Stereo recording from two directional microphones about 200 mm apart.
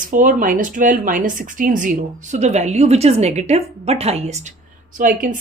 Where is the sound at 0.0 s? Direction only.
40° right (ahead or behind).